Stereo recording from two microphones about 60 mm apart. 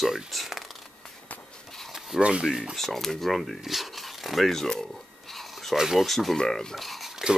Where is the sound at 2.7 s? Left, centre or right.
Centre.